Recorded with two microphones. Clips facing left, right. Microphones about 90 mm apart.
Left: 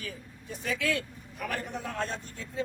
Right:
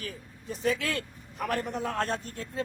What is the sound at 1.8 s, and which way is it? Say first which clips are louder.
Speech: right 4 dB; 60° right (ahead or behind).